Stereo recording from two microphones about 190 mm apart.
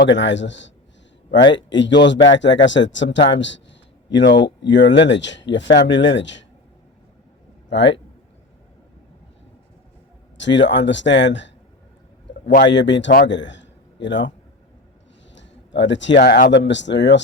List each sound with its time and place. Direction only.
0.1 s speech: 70° left (ahead or behind)
7.7 s speech: 70° left (ahead or behind)
10.3 s speech: 70° left (ahead or behind)
12.6 s a man's voice: 70° left (ahead or behind)
15.4 s speech: 70° left (ahead or behind)